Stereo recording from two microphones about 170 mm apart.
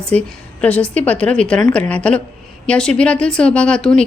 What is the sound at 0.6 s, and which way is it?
A woman's voice, 10° left (ahead or behind).